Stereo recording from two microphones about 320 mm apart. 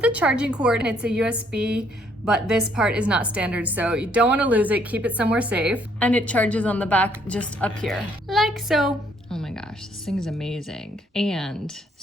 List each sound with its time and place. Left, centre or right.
0.0 s a woman's voice: centre
9.3 s music: centre
10.1 s a woman's voice: centre